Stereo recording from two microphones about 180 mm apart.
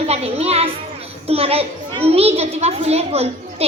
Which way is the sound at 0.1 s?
35° right (ahead or behind).